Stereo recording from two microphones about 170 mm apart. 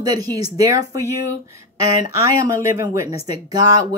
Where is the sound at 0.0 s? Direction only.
20° right (ahead or behind).